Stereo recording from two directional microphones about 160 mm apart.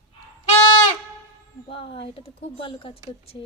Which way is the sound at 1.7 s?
35° left (ahead or behind).